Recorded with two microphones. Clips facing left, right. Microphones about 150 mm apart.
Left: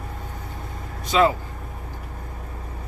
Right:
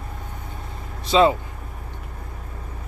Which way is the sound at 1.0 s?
25° right (ahead or behind).